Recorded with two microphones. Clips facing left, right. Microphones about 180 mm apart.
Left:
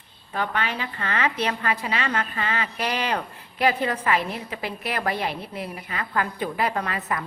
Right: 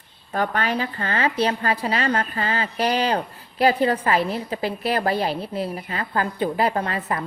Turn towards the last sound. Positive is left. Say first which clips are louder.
# right 3 dB
turn(degrees=-30)  # may be behind; listen again after turning